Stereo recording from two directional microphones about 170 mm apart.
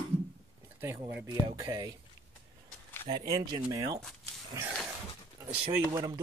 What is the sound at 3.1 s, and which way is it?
Speech, 25° right (ahead or behind).